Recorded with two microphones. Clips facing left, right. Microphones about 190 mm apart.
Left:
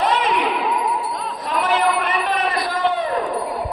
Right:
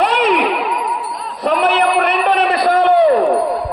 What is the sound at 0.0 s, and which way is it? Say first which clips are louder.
Ding: right 5 dB; 65° right (ahead or behind).